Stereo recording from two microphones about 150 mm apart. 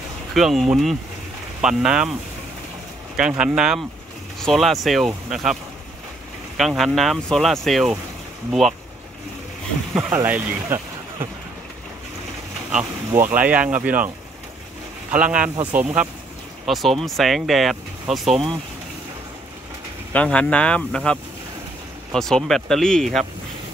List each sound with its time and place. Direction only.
0.3 s speech: centre (ahead or behind)
3.2 s speech: 5° right (ahead or behind)
6.8 s speech: centre (ahead or behind)
10.0 s speech: 15° right (ahead or behind)
13.4 s speech: 10° right (ahead or behind)
16.6 s speech: centre (ahead or behind)
20.1 s speech: 10° left (ahead or behind)